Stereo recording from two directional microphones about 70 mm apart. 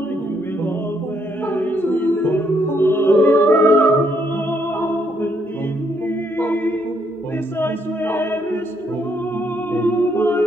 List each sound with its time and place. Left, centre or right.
1.5 s music: left
6.4 s music: left
9.8 s music: left